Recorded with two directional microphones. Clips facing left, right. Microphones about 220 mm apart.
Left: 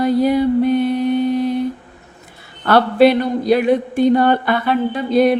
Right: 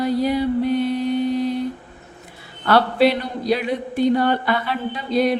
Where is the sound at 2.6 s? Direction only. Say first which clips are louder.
Left 4 dB; 50° left (ahead or behind).